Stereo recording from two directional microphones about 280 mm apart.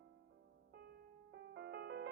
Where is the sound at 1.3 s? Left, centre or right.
Right.